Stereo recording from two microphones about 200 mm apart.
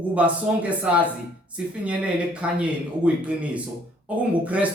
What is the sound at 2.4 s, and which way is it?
Speech, 5° right (ahead or behind).